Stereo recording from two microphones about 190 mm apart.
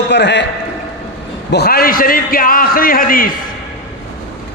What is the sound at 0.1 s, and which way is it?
Speech, 65° left (ahead or behind).